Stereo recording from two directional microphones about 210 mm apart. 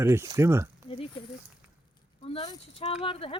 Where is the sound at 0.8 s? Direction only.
25° left (ahead or behind).